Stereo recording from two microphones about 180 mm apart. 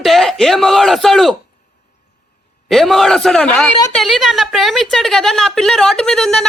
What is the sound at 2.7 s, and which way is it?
A woman's voice, centre (ahead or behind).